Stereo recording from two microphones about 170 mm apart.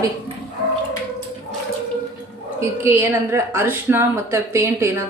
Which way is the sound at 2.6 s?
15° right (ahead or behind).